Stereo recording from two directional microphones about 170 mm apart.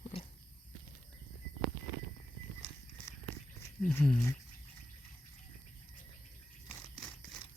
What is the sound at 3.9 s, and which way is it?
Speech, 15° left (ahead or behind).